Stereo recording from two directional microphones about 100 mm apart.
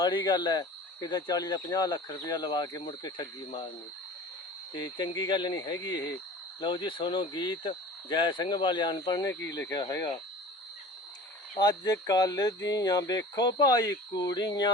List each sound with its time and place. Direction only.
0.0 s speech: 45° left (ahead or behind)
4.7 s speech: 45° left (ahead or behind)
9.6 s speech: 40° left (ahead or behind)
11.5 s speech: 45° left (ahead or behind)